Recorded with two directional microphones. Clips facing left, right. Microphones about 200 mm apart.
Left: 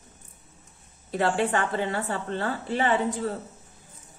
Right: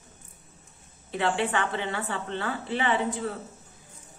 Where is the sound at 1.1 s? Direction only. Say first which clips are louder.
Left 2 dB; 40° left (ahead or behind).